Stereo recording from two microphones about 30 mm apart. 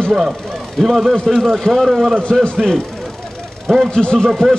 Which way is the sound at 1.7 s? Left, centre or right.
Centre.